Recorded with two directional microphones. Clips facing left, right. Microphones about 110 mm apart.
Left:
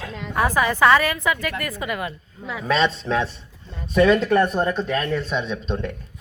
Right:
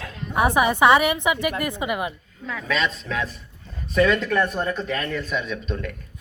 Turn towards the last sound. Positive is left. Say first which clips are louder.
# left 3 dB
turn(degrees=30)  # may be behind; listen again after turning